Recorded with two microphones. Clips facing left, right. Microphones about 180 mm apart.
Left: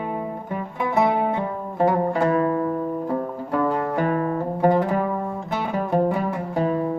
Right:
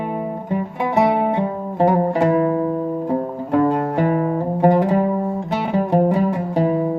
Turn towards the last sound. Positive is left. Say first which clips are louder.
# right 4 dB
turn(degrees=-20)  # may be behind; listen again after turning